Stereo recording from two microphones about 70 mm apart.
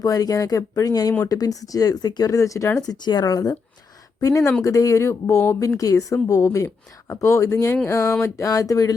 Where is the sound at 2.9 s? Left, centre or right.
Left.